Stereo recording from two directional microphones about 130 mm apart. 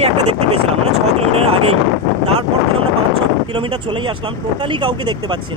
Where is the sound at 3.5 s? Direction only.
40° right (ahead or behind).